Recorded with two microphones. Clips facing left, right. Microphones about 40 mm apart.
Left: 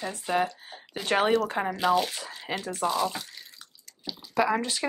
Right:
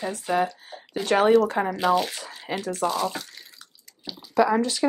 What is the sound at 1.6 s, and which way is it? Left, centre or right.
Speech, centre.